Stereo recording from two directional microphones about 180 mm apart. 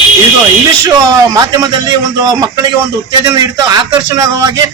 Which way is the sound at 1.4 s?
20° right (ahead or behind).